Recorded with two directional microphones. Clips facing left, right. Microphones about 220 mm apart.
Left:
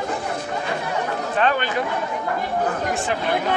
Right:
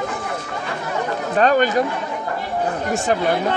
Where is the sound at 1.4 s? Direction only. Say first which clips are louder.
Right 6 dB; 40° right (ahead or behind).